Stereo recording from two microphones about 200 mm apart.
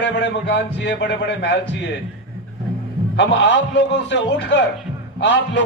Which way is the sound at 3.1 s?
60° left (ahead or behind).